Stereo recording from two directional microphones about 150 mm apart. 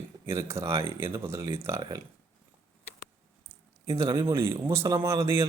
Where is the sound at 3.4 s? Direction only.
20° right (ahead or behind).